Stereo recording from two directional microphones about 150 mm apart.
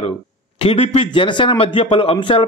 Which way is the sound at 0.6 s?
40° left (ahead or behind).